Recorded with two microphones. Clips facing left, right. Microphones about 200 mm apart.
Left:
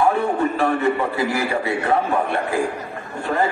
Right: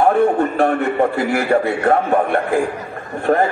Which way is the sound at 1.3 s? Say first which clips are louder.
Right 5 dB; 55° right (ahead or behind).